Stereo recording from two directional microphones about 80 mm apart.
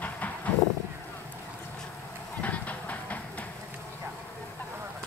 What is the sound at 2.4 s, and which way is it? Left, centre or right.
Vehicle, centre.